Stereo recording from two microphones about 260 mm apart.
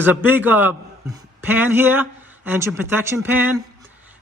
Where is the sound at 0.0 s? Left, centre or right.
Centre.